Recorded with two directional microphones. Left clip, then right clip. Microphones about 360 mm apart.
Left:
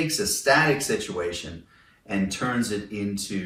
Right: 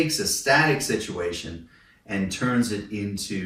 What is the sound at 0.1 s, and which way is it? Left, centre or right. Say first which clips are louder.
Speech: even; centre.